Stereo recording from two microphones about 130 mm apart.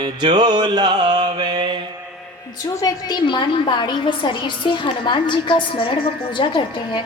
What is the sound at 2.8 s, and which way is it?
A woman's voice, 30° left (ahead or behind).